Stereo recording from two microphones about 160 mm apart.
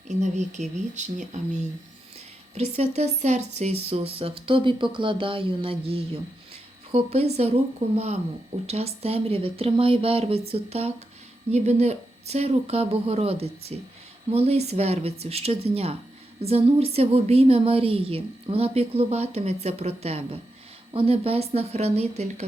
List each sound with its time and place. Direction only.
0.1 s a woman's voice: 45° right (ahead or behind)